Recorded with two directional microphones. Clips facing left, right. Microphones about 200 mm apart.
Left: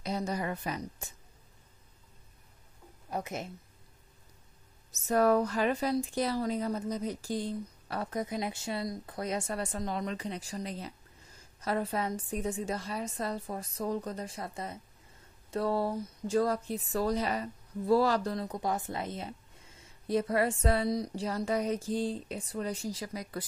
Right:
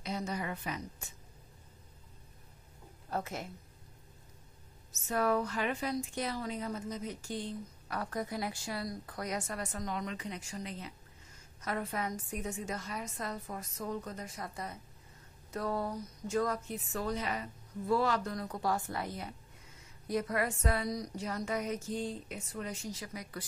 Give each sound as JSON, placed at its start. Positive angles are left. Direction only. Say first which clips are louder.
{"t": 0.0, "sound": "a woman's voice", "louder": "left 4 dB", "side_deg": 35}
{"t": 3.1, "sound": "speech", "louder": "left 2 dB", "side_deg": 15}
{"t": 4.9, "sound": "speech", "louder": "left 6 dB", "side_deg": 40}
{"t": 8.0, "sound": "a woman's voice", "louder": "left 3 dB", "side_deg": 20}